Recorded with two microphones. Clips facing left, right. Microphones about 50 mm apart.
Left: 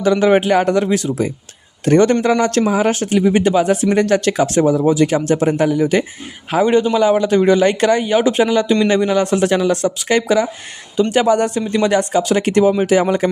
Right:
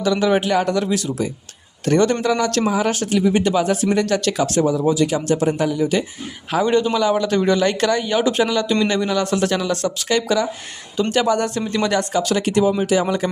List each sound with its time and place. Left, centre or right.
0.0 s a man's voice: left
6.5 s a man's voice: centre
12.5 s speech: left